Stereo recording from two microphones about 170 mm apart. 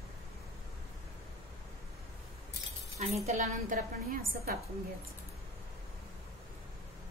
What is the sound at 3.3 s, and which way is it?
A woman's voice, 50° right (ahead or behind).